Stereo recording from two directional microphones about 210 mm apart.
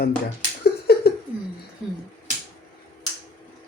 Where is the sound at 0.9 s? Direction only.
50° left (ahead or behind).